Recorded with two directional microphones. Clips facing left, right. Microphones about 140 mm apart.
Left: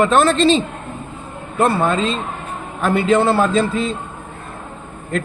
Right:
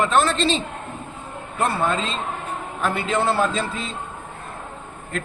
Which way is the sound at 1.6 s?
65° left (ahead or behind).